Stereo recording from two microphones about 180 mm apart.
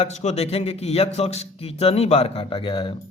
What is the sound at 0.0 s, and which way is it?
A man's voice, 40° left (ahead or behind).